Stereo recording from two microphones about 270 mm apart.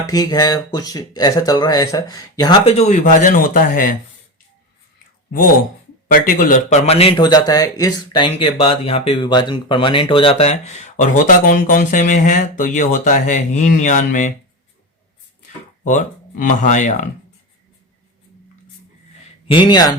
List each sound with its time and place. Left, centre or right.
0.1 s speech: centre; by 3.9 s left
6.1 s speech: left
15.8 s speech: left
19.5 s speech: centre